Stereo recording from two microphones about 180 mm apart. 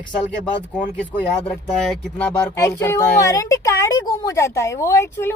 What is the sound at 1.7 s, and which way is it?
Speech, 5° left (ahead or behind).